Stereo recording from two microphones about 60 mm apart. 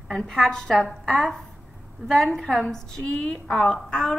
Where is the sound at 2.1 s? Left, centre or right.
Centre.